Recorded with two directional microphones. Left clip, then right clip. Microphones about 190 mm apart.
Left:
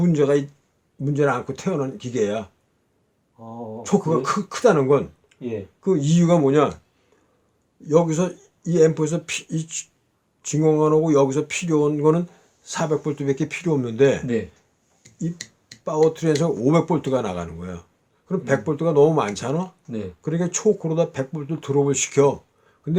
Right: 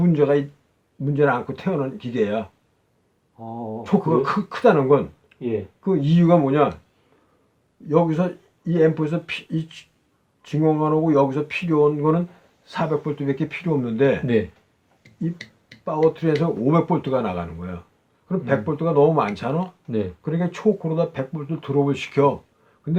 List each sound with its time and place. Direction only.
0.0 s speech: 50° left (ahead or behind)
3.3 s speech: 25° right (ahead or behind)
3.8 s speech: 45° left (ahead or behind)
7.9 s speech: 50° left (ahead or behind)
15.0 s a sound: 20° left (ahead or behind)
15.7 s tick-tock: 20° left (ahead or behind)
16.0 s speech: 50° left (ahead or behind)